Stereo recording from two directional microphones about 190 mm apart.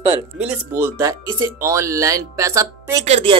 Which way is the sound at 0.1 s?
10° right (ahead or behind).